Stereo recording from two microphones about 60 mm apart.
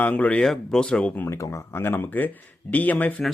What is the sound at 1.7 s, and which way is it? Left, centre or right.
Speech, left.